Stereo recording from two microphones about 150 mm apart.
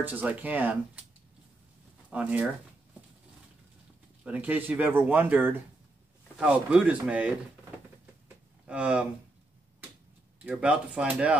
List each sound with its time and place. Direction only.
0.0 s speech: 10° right (ahead or behind)
2.0 s speech: 10° right (ahead or behind)
4.2 s speech: 10° right (ahead or behind)
8.6 s speech: 5° right (ahead or behind)
10.4 s speech: 10° right (ahead or behind)